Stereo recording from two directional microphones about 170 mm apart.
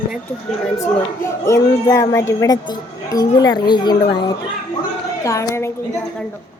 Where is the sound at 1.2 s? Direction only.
20° left (ahead or behind).